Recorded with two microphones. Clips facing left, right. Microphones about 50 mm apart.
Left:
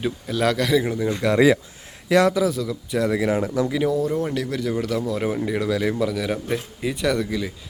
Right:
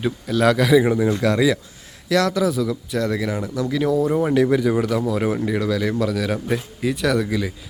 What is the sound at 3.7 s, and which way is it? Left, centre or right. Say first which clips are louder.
Speech: right 5 dB; centre.